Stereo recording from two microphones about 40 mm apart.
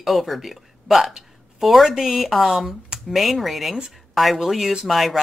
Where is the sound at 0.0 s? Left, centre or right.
Centre.